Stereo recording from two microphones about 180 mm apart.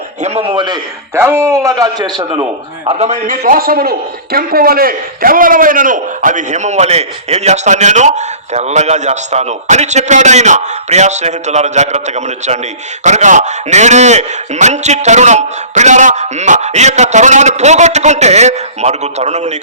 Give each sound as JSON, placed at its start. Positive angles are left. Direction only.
{"t": 0.2, "sound": "a man's voice", "side_deg": -35}
{"t": 1.1, "sound": "a man's voice", "side_deg": -15}